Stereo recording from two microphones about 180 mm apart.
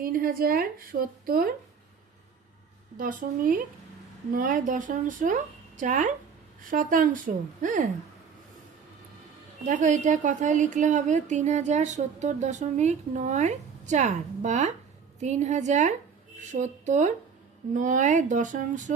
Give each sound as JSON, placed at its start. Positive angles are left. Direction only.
{"t": 0.0, "sound": "a woman's voice", "side_deg": -55}
{"t": 3.0, "sound": "speech", "side_deg": -50}
{"t": 9.6, "sound": "a woman's voice", "side_deg": -45}